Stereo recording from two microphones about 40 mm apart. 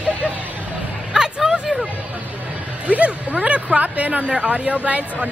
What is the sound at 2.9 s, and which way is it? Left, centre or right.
Speech, right.